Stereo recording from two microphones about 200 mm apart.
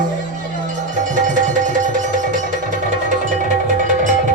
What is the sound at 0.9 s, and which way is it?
Music, 40° right (ahead or behind).